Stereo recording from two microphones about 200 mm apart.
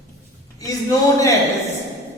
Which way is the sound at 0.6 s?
15° left (ahead or behind).